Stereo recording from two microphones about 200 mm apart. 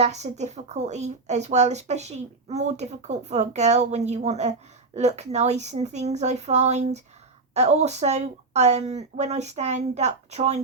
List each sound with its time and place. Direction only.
0.0 s speech: 35° right (ahead or behind)